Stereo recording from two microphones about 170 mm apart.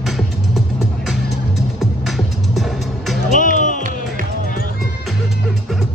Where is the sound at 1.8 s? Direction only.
Centre (ahead or behind).